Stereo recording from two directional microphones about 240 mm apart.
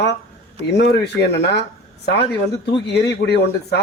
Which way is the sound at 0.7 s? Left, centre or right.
Left.